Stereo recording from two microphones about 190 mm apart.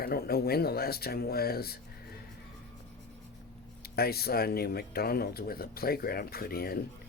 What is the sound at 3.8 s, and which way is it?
Speech, 55° left (ahead or behind).